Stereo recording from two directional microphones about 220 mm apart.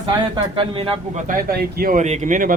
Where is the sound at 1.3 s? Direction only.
40° right (ahead or behind).